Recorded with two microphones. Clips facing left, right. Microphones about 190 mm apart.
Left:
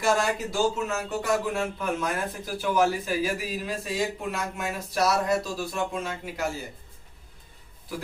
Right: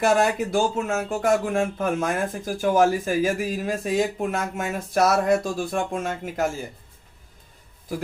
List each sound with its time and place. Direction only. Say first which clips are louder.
0.0 s speech: right 5 dB; 55° right (ahead or behind)